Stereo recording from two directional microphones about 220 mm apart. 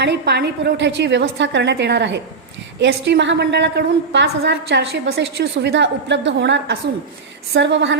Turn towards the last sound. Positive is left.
turn(degrees=-55)  # may be behind; listen again after turning